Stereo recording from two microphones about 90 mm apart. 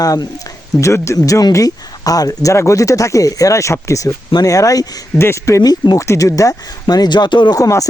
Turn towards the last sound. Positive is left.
turn(degrees=40)  # may be behind; listen again after turning